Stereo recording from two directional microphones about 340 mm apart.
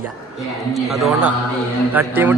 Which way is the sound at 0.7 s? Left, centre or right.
Centre.